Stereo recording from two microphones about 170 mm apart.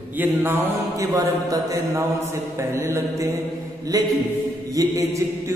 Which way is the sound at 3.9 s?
20° right (ahead or behind).